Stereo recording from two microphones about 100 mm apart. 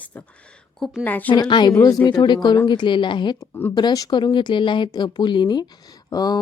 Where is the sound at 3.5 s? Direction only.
25° left (ahead or behind).